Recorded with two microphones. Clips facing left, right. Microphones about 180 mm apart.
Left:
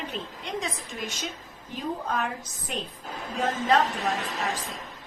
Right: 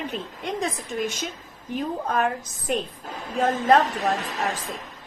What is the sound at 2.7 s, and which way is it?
A woman's voice, 50° right (ahead or behind).